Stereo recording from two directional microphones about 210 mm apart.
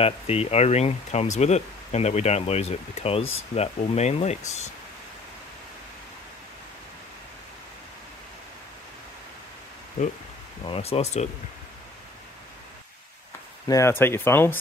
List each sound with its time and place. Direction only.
0.0 s speech: 30° left (ahead or behind)
10.6 s speech: 25° left (ahead or behind)
13.7 s speech: 15° left (ahead or behind)